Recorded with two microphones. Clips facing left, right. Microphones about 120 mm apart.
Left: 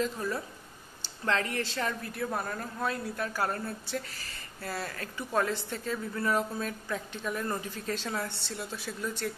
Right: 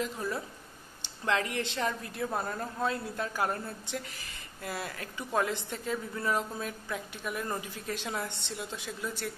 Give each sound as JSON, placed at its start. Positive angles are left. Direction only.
{"t": 0.0, "sound": "a woman's voice", "side_deg": -15}